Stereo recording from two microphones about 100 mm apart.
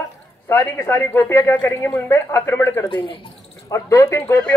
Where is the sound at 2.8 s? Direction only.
55° left (ahead or behind).